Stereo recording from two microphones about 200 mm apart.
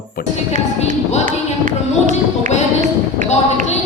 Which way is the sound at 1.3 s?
40° right (ahead or behind).